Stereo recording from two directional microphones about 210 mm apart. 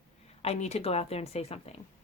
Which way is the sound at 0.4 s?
30° left (ahead or behind).